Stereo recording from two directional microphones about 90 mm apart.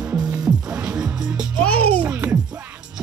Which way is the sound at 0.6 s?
15° right (ahead or behind).